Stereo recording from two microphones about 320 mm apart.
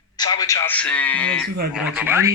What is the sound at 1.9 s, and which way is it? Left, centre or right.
Speech, centre.